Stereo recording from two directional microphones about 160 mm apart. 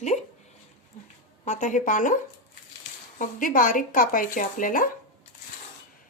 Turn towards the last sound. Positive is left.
turn(degrees=60)  # may be behind; listen again after turning